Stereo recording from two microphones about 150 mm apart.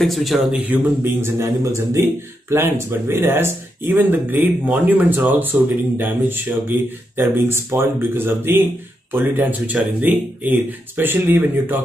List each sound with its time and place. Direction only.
0.0 s a man's voice: centre (ahead or behind)